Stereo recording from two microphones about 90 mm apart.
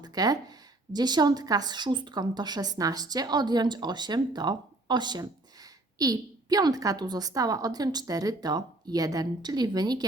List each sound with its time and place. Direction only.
0.0 s speech: 45° right (ahead or behind)